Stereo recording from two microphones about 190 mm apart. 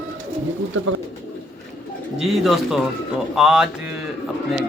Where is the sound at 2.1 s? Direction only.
Centre (ahead or behind).